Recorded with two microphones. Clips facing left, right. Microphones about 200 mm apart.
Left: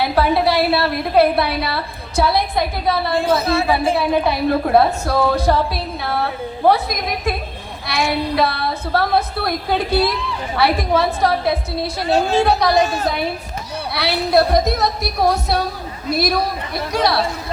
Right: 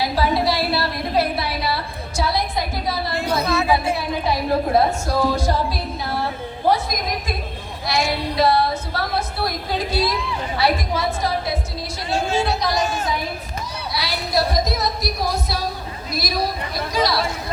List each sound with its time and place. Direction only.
0.0 s a sound: 60° left (ahead or behind)
3.4 s speech: 30° left (ahead or behind)
3.9 s a woman's voice: 60° left (ahead or behind)
13.9 s a woman's voice: 65° left (ahead or behind)